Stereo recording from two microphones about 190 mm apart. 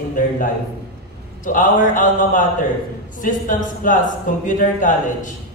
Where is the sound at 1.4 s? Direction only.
45° left (ahead or behind).